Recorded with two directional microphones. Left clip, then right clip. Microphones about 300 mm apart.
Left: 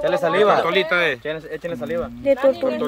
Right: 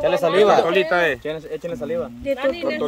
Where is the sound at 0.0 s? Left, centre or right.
Right.